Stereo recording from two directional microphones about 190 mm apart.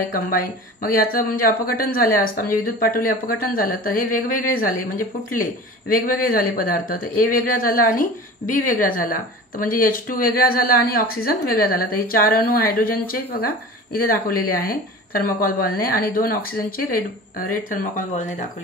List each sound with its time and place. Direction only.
0.0 s speech: 50° left (ahead or behind)